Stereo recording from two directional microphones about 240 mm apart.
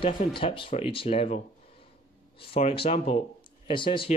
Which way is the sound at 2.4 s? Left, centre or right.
Left.